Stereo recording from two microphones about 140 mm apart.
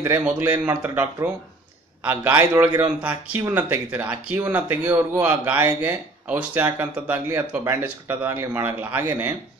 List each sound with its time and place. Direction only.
0.0 s speech: 15° right (ahead or behind)